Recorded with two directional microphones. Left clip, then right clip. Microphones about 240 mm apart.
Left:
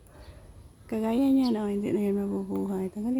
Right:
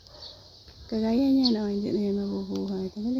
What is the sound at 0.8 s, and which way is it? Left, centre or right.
Speech, centre.